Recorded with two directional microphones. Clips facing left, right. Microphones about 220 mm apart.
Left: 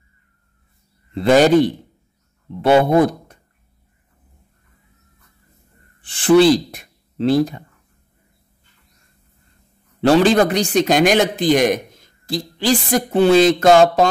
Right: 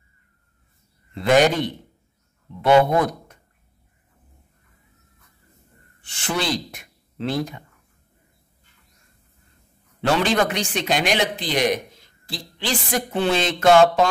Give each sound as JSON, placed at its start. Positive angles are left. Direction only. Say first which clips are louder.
{"t": 1.1, "sound": "speech", "louder": "left 5 dB", "side_deg": 35}
{"t": 6.0, "sound": "speech", "louder": "left 14 dB", "side_deg": 30}
{"t": 10.0, "sound": "speech", "louder": "left 7 dB", "side_deg": 35}